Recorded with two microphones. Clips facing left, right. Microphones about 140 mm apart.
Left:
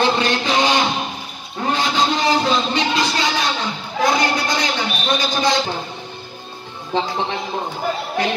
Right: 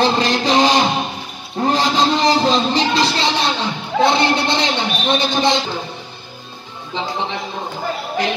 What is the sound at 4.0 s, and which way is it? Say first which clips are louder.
Speech: right 3 dB; 25° right (ahead or behind).